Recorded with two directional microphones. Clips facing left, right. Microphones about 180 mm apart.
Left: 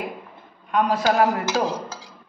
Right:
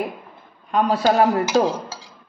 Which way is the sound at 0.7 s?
30° right (ahead or behind).